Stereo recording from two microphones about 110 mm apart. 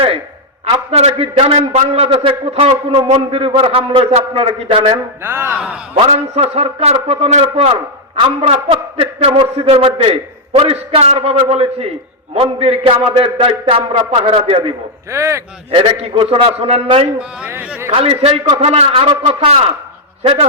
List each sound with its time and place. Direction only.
0.9 s a man's voice: 65° right (ahead or behind)
2.2 s a man's voice: 65° right (ahead or behind)
5.2 s music: 20° right (ahead or behind)
6.1 s a man's voice: 70° right (ahead or behind)
8.4 s a man's voice: 60° right (ahead or behind)
15.1 s music: 25° right (ahead or behind)
15.7 s a man's voice: 60° right (ahead or behind)
17.2 s speech: 15° right (ahead or behind)
17.9 s a man's voice: 60° right (ahead or behind)